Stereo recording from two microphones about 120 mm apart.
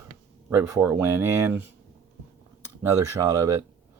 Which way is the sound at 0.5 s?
20° right (ahead or behind).